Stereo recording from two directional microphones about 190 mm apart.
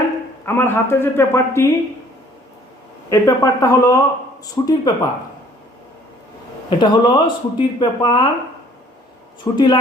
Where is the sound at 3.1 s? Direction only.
15° left (ahead or behind).